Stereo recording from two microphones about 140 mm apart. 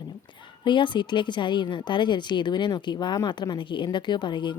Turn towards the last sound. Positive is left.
turn(degrees=35)  # may be behind; listen again after turning